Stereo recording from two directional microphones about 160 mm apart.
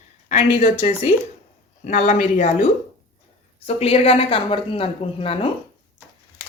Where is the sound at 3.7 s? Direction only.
40° left (ahead or behind).